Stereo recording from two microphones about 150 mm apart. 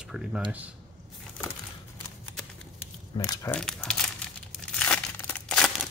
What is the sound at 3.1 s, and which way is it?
Speech, 35° left (ahead or behind).